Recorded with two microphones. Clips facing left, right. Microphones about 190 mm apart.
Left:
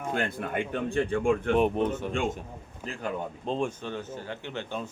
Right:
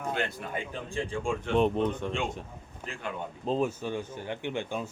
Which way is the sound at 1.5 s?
10° left (ahead or behind).